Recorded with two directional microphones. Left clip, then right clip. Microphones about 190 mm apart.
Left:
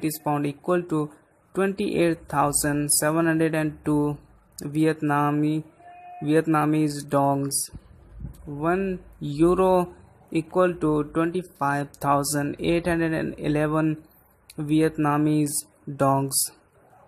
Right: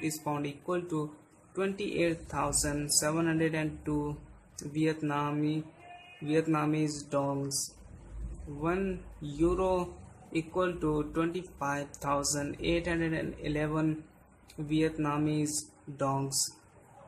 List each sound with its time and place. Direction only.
0.0 s speech: 40° left (ahead or behind)
8.5 s speech: 30° left (ahead or behind)